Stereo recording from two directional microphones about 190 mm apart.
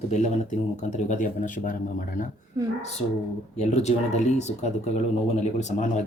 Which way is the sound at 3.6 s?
35° left (ahead or behind).